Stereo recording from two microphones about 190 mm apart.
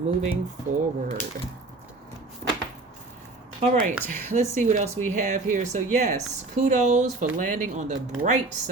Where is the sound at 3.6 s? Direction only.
30° right (ahead or behind).